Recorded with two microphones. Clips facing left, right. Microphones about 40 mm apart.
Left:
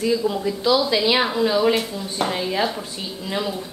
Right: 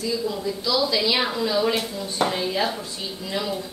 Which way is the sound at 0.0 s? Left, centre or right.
Left.